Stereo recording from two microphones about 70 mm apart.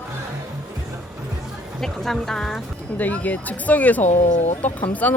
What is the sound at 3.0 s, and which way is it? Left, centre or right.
Speech, left.